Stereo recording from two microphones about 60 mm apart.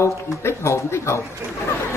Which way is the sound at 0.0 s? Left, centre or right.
Left.